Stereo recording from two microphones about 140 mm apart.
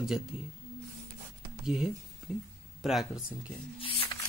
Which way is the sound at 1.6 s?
5° right (ahead or behind).